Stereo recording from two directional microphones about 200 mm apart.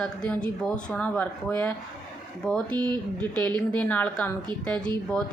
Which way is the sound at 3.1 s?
5° left (ahead or behind).